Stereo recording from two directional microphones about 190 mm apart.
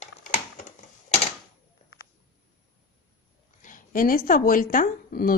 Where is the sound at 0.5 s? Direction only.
35° left (ahead or behind).